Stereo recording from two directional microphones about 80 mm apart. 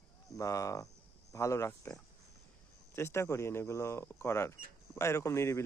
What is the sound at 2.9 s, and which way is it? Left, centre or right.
Speech, left.